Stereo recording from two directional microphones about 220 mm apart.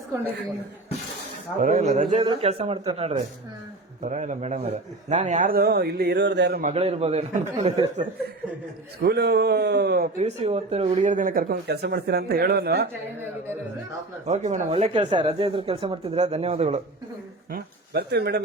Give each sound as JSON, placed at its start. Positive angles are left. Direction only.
{"t": 1.6, "sound": "speech", "side_deg": -35}
{"t": 6.7, "sound": "speech", "side_deg": -30}
{"t": 9.0, "sound": "a man's voice", "side_deg": -50}
{"t": 10.2, "sound": "speech", "side_deg": -30}
{"t": 14.3, "sound": "speech", "side_deg": -35}
{"t": 17.5, "sound": "speech", "side_deg": -45}